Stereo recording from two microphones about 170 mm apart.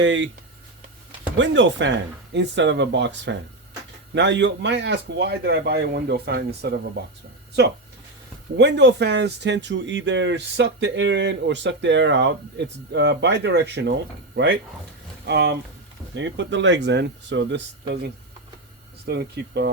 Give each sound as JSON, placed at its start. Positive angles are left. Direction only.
{"t": 0.0, "sound": "speech", "side_deg": -90}
{"t": 1.4, "sound": "a man's voice", "side_deg": -90}
{"t": 8.5, "sound": "a man's voice", "side_deg": -90}
{"t": 19.0, "sound": "speech", "side_deg": -75}